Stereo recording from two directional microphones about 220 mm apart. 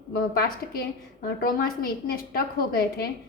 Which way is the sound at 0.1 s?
45° left (ahead or behind).